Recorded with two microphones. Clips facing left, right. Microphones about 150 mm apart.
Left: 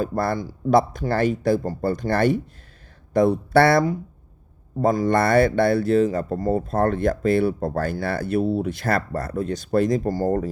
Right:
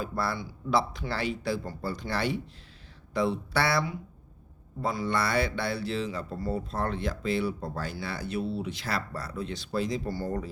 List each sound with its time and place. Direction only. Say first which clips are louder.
0.0 s speech: left 8 dB; 45° left (ahead or behind)